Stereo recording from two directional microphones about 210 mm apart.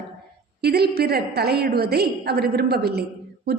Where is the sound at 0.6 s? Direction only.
50° right (ahead or behind).